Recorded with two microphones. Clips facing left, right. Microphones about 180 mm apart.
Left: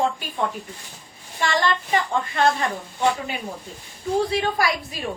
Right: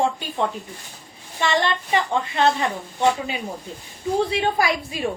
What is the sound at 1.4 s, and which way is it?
Speech, 25° right (ahead or behind).